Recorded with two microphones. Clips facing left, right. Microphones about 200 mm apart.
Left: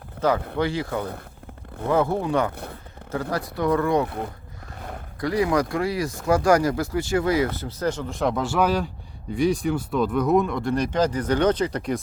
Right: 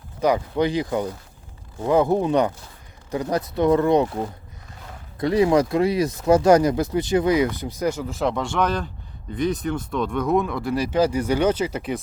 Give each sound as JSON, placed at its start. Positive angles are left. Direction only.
{"t": 0.2, "sound": "speech", "side_deg": -15}
{"t": 5.2, "sound": "speech", "side_deg": -25}